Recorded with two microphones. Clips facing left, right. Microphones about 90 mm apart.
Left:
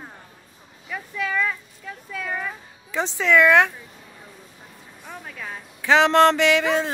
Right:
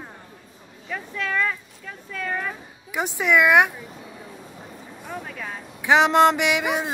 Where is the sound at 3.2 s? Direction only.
15° right (ahead or behind).